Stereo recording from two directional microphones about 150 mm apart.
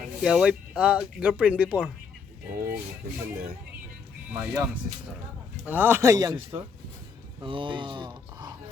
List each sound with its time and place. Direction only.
0.2 s speech: 5° right (ahead or behind)
4.3 s speech: 15° right (ahead or behind)
5.6 s a man's voice: 15° right (ahead or behind)
7.4 s speech: 35° right (ahead or behind)